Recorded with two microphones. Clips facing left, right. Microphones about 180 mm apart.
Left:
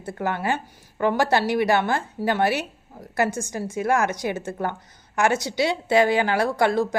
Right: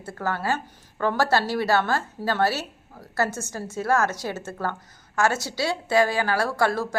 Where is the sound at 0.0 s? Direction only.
15° left (ahead or behind).